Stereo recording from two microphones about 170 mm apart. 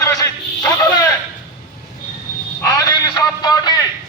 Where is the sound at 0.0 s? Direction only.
20° left (ahead or behind).